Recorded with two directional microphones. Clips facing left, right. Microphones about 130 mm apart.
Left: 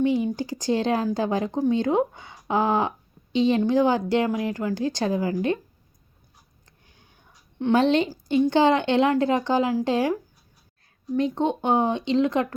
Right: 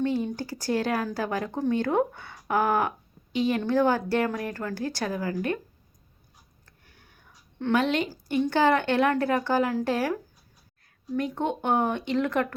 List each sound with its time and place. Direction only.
0.0 s speech: 15° left (ahead or behind)
6.7 s tick: 20° left (ahead or behind)
7.6 s speech: 25° left (ahead or behind)